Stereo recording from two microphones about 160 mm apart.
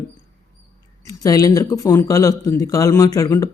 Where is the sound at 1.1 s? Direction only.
20° left (ahead or behind).